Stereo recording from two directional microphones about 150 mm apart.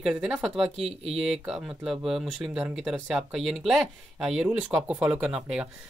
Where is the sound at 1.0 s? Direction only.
40° right (ahead or behind).